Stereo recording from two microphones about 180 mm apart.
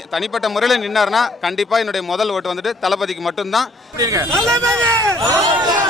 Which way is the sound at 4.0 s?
20° right (ahead or behind).